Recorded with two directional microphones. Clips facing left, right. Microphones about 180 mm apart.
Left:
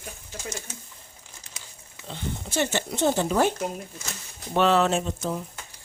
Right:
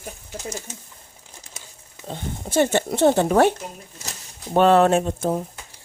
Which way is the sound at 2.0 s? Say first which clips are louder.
Right 3 dB; 50° right (ahead or behind).